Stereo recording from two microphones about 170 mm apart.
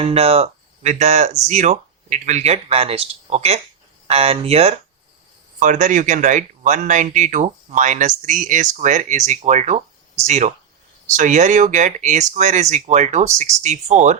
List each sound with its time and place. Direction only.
0.0 s speech: 35° right (ahead or behind)
5.5 s speech: 50° right (ahead or behind)